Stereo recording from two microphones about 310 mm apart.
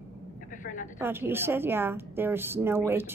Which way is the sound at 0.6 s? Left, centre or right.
Left.